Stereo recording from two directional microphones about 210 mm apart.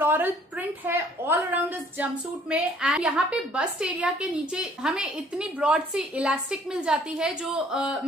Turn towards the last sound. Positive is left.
turn(degrees=-5)  # may be behind; listen again after turning